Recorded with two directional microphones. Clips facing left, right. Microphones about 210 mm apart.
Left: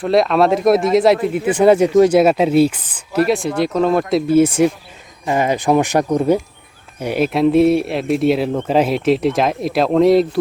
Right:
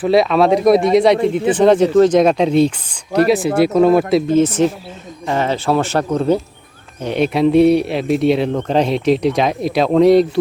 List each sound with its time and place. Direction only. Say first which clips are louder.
0.0 s speech: right 1 dB; centre (ahead or behind)
4.3 s speech: left 1 dB; 10° left (ahead or behind)